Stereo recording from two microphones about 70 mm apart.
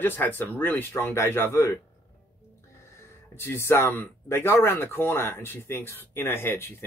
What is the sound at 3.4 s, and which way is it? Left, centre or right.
Speech, left.